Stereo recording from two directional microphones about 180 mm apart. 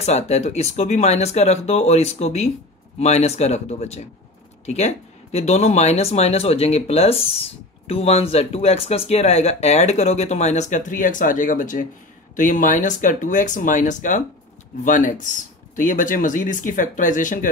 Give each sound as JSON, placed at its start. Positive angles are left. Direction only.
{"t": 0.0, "sound": "speech", "side_deg": 40}